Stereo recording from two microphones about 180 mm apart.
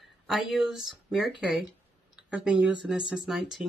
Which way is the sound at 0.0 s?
Centre (ahead or behind).